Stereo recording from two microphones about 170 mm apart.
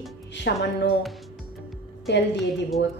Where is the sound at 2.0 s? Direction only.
90° left.